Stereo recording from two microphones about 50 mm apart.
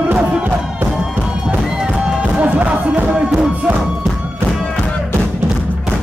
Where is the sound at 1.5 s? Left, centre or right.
Right.